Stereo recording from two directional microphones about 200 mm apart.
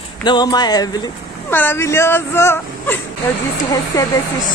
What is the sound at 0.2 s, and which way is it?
Speech, 20° left (ahead or behind).